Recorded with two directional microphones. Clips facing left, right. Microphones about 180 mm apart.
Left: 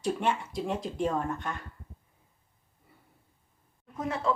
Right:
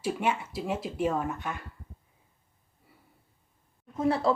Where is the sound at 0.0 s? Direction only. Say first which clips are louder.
Even; 5° right (ahead or behind).